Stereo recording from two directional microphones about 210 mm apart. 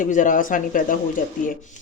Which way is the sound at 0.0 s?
40° left (ahead or behind).